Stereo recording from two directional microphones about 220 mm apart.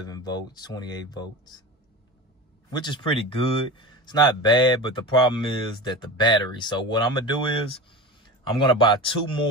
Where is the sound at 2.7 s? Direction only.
20° left (ahead or behind).